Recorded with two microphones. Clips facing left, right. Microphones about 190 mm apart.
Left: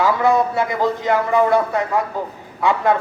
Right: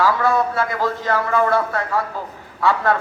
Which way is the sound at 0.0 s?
20° left (ahead or behind).